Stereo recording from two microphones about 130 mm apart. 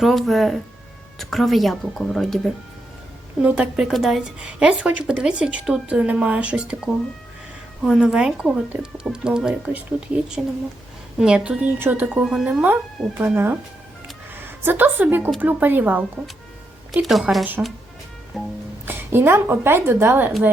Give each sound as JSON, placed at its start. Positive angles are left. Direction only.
{"t": 0.0, "sound": "speech", "side_deg": 0}
{"t": 3.4, "sound": "a woman's voice", "side_deg": -10}
{"t": 7.9, "sound": "a woman's voice", "side_deg": -5}
{"t": 12.2, "sound": "speech", "side_deg": 0}
{"t": 12.5, "sound": "a woman's voice", "side_deg": -15}
{"t": 16.9, "sound": "speech", "side_deg": 0}
{"t": 18.9, "sound": "a woman's voice", "side_deg": -15}